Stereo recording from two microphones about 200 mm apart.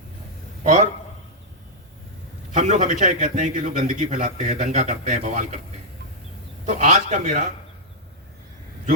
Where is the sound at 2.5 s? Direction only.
35° right (ahead or behind).